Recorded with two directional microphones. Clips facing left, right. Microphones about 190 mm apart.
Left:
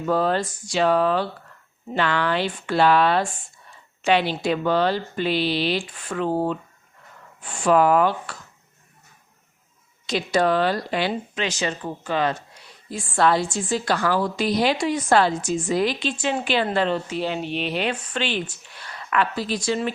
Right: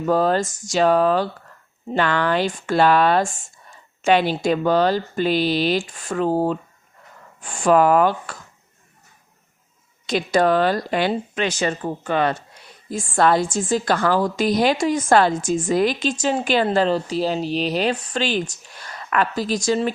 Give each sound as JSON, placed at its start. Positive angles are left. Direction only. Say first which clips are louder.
{"t": 0.0, "sound": "a woman's voice", "louder": "right 3 dB", "side_deg": -40}
{"t": 10.1, "sound": "a woman's voice", "louder": "right 3 dB", "side_deg": -50}
{"t": 12.9, "sound": "a woman's voice", "louder": "right 2 dB", "side_deg": -45}